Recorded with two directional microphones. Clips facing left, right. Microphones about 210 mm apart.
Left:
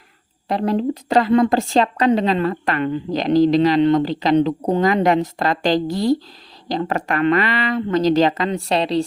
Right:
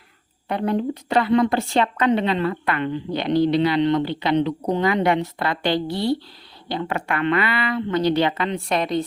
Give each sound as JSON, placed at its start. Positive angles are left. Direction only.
{"t": 0.4, "sound": "a woman's voice", "side_deg": 35}
{"t": 5.7, "sound": "speech", "side_deg": 90}
{"t": 6.7, "sound": "a woman's voice", "side_deg": 40}